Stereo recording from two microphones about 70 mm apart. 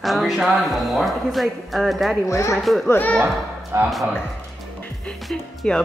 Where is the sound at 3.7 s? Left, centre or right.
Right.